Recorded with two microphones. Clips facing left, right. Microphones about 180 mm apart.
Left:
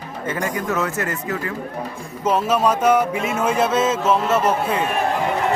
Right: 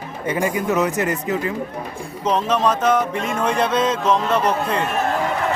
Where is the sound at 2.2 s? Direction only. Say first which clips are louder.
Left 1 dB; 5° left (ahead or behind).